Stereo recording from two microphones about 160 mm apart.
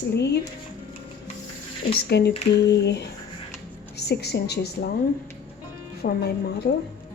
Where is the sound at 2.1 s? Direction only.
90° left.